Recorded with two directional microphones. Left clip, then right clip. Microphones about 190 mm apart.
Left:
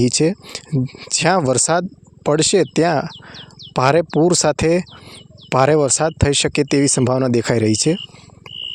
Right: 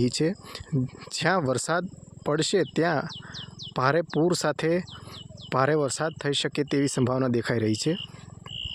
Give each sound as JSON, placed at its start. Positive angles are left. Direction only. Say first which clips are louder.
{"t": 0.0, "sound": "speech", "louder": "left 9 dB", "side_deg": 35}